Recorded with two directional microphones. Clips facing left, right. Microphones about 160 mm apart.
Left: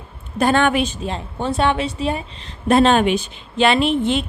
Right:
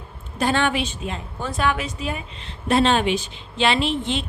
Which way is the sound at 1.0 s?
30° left (ahead or behind).